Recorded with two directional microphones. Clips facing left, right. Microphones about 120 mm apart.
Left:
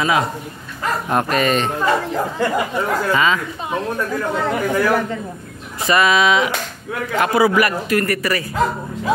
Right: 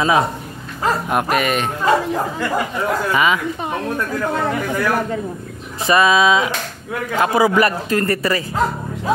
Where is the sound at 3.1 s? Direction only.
15° right (ahead or behind).